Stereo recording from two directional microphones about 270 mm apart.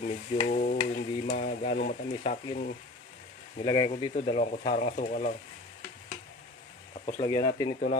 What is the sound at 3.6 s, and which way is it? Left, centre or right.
Speech, left.